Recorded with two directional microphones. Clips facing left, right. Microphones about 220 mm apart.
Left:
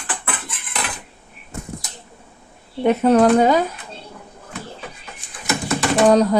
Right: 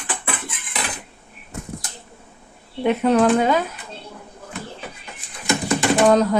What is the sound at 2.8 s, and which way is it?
Speech, 40° left (ahead or behind).